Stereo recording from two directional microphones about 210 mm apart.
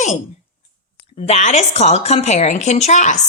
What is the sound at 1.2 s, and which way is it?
A woman's voice, 35° left (ahead or behind).